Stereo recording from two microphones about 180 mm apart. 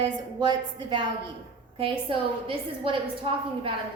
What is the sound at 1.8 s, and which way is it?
A woman's voice, 30° right (ahead or behind).